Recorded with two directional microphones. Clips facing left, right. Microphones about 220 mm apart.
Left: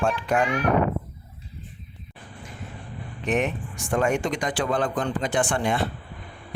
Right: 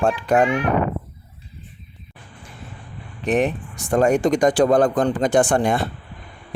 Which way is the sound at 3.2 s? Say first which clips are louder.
Right 5 dB; 35° right (ahead or behind).